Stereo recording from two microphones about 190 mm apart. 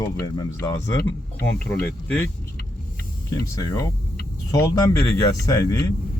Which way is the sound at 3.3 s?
15° left (ahead or behind).